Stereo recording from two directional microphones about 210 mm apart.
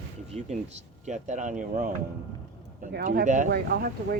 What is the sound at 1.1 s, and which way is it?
Speech, 35° right (ahead or behind).